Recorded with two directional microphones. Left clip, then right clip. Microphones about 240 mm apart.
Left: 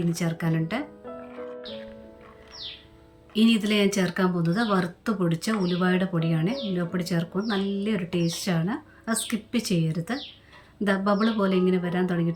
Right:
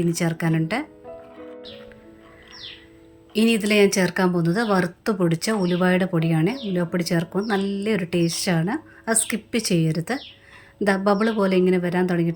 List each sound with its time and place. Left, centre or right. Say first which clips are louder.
0.1 s speech: right 5 dB; centre
3.3 s speech: right 4 dB; centre